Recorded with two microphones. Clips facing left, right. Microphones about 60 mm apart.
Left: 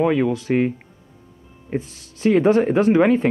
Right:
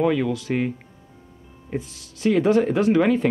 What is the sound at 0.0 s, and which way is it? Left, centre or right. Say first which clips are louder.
Speech: left 3 dB; left.